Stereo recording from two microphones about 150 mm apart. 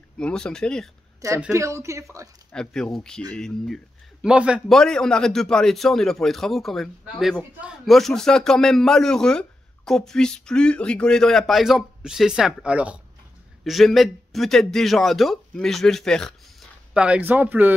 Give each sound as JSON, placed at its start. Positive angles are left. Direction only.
{"t": 0.2, "sound": "a man's voice", "side_deg": 5}
{"t": 1.5, "sound": "speech", "side_deg": -20}
{"t": 2.5, "sound": "a man's voice", "side_deg": 5}
{"t": 16.9, "sound": "speech", "side_deg": -10}